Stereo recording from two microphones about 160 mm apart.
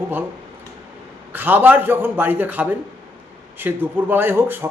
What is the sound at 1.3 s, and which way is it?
Speech, 10° right (ahead or behind).